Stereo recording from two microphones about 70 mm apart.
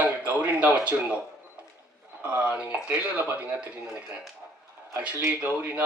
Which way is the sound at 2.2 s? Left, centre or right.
Centre.